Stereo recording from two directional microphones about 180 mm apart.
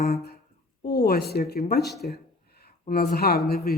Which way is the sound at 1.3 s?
65° left (ahead or behind).